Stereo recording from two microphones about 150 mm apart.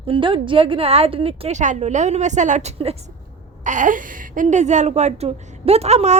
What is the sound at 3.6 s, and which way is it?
A woman's voice, 55° right (ahead or behind).